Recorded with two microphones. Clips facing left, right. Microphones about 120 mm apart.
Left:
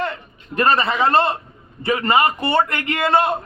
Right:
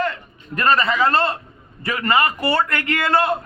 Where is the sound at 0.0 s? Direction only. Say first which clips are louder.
Right 1 dB; 25° left (ahead or behind).